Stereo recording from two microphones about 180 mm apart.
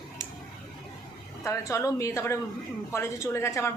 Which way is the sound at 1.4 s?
15° left (ahead or behind).